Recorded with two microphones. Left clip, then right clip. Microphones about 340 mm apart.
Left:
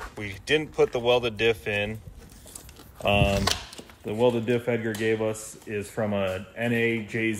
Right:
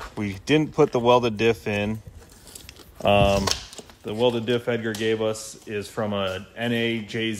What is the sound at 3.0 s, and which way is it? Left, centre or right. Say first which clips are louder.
Speech: right 4 dB; centre.